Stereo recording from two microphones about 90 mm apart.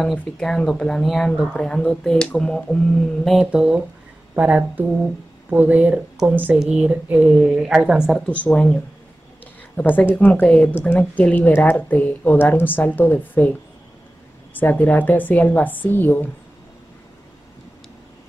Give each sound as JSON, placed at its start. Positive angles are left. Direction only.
{"t": 0.0, "sound": "a woman's voice", "side_deg": 0}
{"t": 8.3, "sound": "a woman's voice", "side_deg": 15}